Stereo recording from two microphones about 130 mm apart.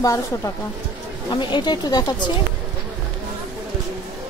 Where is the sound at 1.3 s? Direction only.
35° left (ahead or behind).